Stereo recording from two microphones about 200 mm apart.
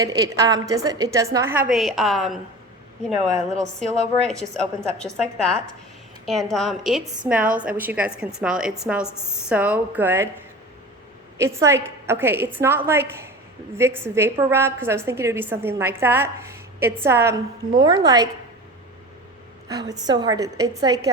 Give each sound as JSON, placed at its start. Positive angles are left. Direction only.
{"t": 0.0, "sound": "a woman's voice", "side_deg": -20}
{"t": 11.3, "sound": "a woman's voice", "side_deg": -15}
{"t": 19.6, "sound": "a woman's voice", "side_deg": -20}